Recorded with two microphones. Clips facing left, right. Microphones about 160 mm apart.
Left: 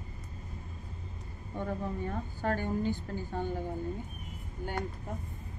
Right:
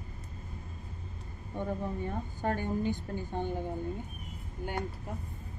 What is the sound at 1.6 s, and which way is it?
A woman's voice, 15° right (ahead or behind).